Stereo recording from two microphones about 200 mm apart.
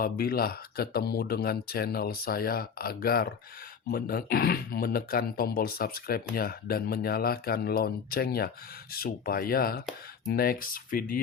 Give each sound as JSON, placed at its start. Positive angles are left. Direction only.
{"t": 0.0, "sound": "speech", "side_deg": 50}